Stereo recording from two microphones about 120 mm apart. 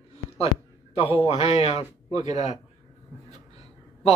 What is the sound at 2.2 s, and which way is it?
Speech, 70° left (ahead or behind).